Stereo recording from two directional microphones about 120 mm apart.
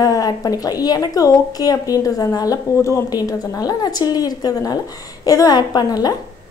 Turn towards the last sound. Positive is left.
turn(degrees=35)  # may be behind; listen again after turning